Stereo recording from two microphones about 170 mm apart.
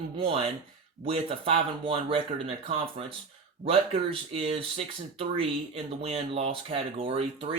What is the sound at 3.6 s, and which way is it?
Speech, 35° right (ahead or behind).